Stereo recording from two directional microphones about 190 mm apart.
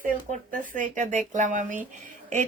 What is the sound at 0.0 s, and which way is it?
A woman's voice, 45° right (ahead or behind).